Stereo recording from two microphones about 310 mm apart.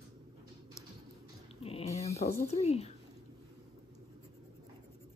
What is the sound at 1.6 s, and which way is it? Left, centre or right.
Dog, centre.